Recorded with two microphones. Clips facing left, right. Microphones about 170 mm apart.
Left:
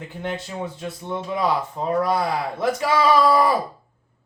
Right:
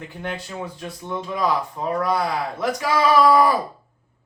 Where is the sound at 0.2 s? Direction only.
20° left (ahead or behind).